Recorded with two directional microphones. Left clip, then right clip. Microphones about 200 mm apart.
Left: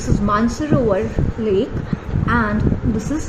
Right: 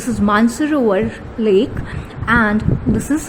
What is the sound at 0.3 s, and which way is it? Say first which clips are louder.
Speech: right 4 dB; 50° right (ahead or behind).